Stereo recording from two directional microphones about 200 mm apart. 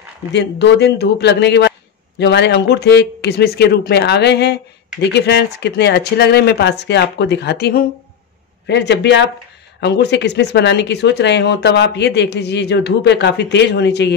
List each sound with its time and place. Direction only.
0.3 s speech: 60° left (ahead or behind)